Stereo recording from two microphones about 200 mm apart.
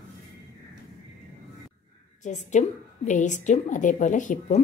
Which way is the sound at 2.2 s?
35° left (ahead or behind).